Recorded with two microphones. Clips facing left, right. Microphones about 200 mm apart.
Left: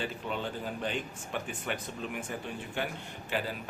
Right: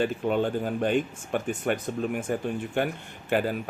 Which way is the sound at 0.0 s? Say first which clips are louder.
Right 10 dB; 50° right (ahead or behind).